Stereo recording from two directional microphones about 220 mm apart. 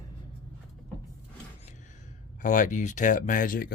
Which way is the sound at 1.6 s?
35° left (ahead or behind).